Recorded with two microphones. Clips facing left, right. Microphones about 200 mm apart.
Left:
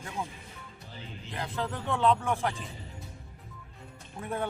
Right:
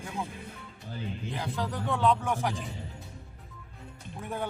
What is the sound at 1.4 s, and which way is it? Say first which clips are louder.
Speech: left 1 dB; centre (ahead or behind).